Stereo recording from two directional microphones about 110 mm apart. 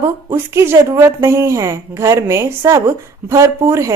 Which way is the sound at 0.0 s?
25° right (ahead or behind).